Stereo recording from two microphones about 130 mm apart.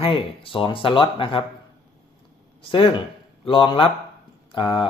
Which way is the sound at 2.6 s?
40° left (ahead or behind).